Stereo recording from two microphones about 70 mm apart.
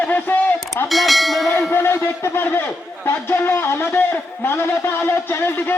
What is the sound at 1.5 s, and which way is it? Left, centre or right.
A man's voice, left.